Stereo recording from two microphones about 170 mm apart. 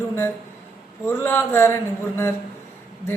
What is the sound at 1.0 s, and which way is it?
A woman's voice, 15° left (ahead or behind).